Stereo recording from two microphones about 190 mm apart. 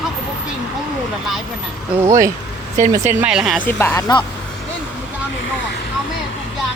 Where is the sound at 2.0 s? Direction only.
15° right (ahead or behind).